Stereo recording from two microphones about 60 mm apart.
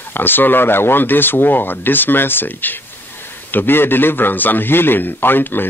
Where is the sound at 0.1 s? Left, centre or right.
Left.